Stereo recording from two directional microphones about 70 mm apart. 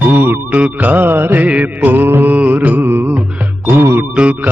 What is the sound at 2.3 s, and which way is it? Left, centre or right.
Music, right.